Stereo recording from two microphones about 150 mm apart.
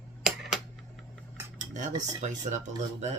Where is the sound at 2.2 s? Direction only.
55° right (ahead or behind).